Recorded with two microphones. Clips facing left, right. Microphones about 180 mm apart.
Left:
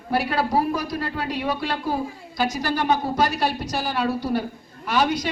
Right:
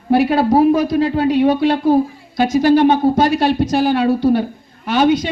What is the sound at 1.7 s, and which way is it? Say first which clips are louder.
Speech: right 12 dB; 60° right (ahead or behind).